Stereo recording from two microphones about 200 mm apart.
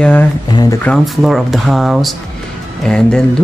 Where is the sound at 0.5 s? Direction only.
20° left (ahead or behind).